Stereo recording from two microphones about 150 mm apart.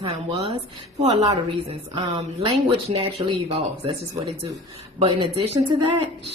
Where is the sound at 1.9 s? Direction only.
35° right (ahead or behind).